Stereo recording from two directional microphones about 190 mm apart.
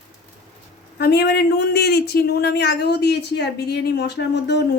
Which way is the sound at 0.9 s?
60° left (ahead or behind).